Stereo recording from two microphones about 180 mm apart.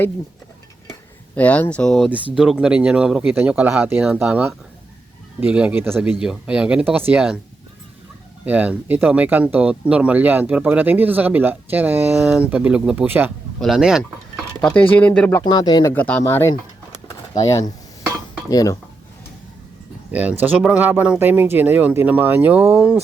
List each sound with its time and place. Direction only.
1.4 s speech: 10° left (ahead or behind)
8.4 s speech: 10° right (ahead or behind); by 15.4 s 5° left (ahead or behind)
15.4 s speech: 20° left (ahead or behind)
20.1 s speech: 10° right (ahead or behind)